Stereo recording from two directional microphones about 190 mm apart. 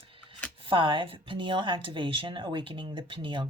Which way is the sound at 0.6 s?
25° right (ahead or behind).